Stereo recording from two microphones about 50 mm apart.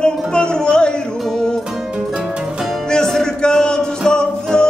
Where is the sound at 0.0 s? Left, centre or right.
Centre.